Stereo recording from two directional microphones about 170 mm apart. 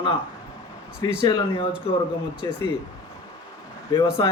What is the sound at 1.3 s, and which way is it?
A man's voice, 30° left (ahead or behind).